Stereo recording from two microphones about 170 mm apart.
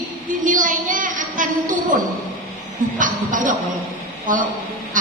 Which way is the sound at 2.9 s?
50° right (ahead or behind).